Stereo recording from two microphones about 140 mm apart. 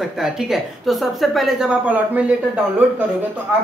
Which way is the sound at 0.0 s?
Centre (ahead or behind).